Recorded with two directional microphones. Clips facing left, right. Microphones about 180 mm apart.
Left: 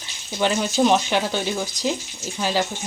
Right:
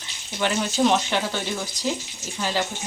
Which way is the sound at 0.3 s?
15° left (ahead or behind).